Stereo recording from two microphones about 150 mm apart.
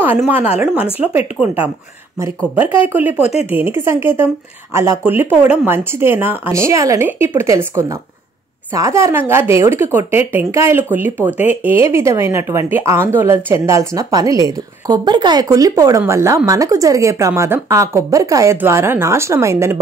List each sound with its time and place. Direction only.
0.3 s a woman's voice: 10° right (ahead or behind)